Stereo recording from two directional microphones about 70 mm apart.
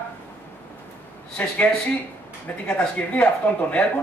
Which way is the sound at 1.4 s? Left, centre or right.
Centre.